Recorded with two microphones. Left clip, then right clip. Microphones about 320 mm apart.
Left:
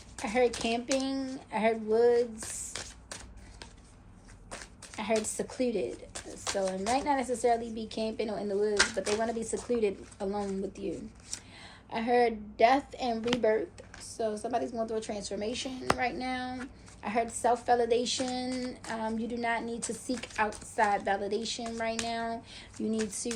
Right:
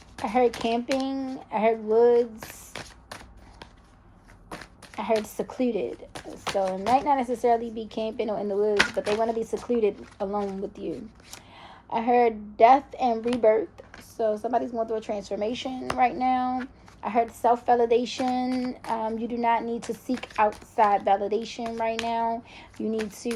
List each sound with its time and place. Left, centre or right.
0.2 s a woman's voice: centre
4.6 s speech: right
10.2 s speech: right
10.8 s a woman's voice: centre